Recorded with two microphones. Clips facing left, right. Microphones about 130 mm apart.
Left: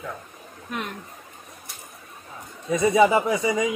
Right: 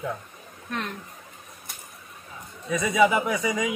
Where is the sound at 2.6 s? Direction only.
30° left (ahead or behind).